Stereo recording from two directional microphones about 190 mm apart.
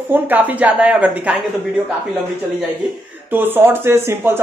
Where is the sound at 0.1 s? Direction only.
10° right (ahead or behind).